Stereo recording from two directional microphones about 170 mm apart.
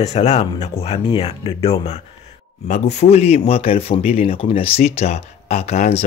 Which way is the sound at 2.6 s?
45° left (ahead or behind).